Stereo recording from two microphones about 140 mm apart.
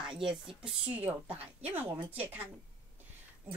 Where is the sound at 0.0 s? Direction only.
5° right (ahead or behind).